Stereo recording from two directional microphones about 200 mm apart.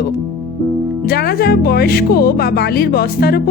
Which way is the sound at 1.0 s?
50° left (ahead or behind).